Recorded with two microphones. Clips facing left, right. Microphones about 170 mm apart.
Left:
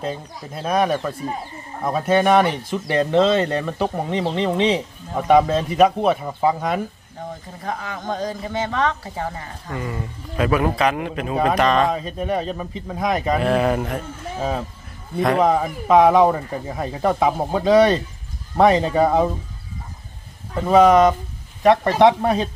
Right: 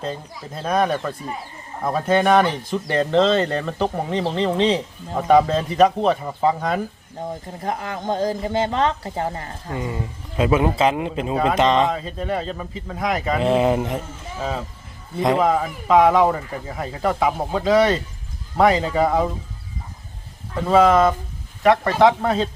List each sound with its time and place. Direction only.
0.0 s speech: 10° left (ahead or behind)
7.6 s speech: 25° right (ahead or behind)
11.9 s speech: 15° left (ahead or behind)
13.4 s speech: 20° right (ahead or behind)
15.4 s speech: 20° left (ahead or behind)
20.7 s speech: 15° left (ahead or behind)